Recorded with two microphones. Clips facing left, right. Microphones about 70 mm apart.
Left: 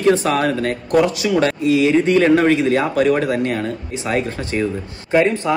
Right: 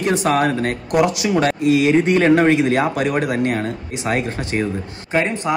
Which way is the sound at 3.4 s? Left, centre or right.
Right.